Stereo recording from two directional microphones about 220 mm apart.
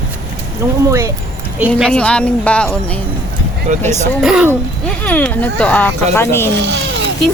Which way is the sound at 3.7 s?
30° right (ahead or behind).